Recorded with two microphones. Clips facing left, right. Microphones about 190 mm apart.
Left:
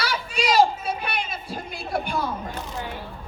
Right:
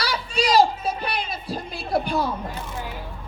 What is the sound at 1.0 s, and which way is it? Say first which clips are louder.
Music: right 2 dB; 35° right (ahead or behind).